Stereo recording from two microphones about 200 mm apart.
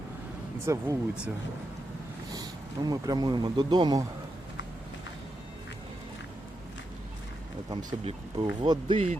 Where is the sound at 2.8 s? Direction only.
20° right (ahead or behind).